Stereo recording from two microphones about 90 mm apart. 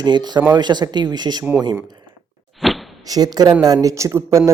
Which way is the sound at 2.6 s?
Centre (ahead or behind).